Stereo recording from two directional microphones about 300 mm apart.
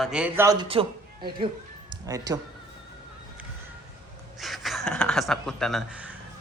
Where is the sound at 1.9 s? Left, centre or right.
Centre.